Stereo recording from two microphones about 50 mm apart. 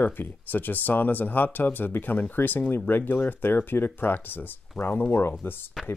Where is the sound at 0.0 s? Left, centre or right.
Left.